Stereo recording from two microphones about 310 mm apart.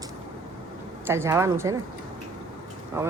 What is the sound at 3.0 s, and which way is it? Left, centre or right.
Speech, centre.